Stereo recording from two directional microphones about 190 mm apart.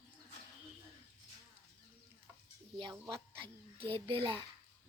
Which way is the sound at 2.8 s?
25° right (ahead or behind).